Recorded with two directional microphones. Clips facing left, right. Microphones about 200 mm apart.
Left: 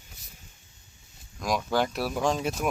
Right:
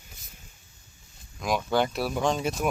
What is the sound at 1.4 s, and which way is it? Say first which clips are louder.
Speech: right 1 dB; centre (ahead or behind).